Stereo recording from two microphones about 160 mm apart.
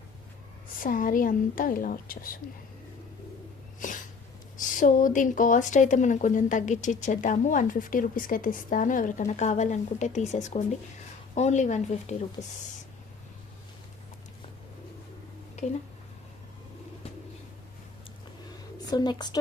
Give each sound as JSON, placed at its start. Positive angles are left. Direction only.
{"t": 0.8, "sound": "a woman's voice", "side_deg": 60}
{"t": 3.8, "sound": "a sound", "side_deg": 55}
{"t": 4.5, "sound": "speech", "side_deg": 55}
{"t": 15.6, "sound": "speech", "side_deg": 45}
{"t": 18.9, "sound": "a woman's voice", "side_deg": 25}